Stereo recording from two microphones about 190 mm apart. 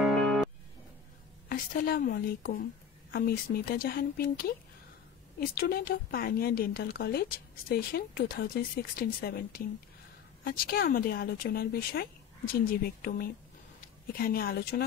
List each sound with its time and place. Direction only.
0.0 s music: centre (ahead or behind)
1.5 s speech: 50° left (ahead or behind)